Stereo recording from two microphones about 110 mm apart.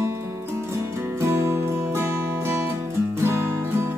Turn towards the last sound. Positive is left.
turn(degrees=-25)  # may be behind; listen again after turning